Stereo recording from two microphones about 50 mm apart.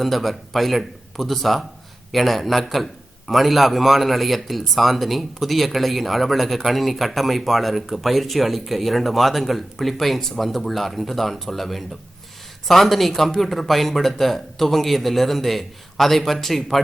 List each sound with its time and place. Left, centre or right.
0.0 s a man's voice: centre